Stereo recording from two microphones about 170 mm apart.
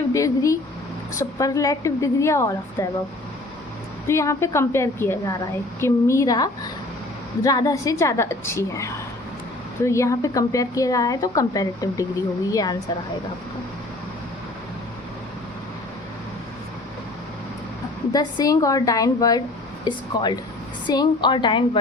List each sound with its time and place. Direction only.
0.1 s a woman's voice: 20° left (ahead or behind)
4.0 s a woman's voice: 15° left (ahead or behind)
18.1 s a woman's voice: 20° left (ahead or behind)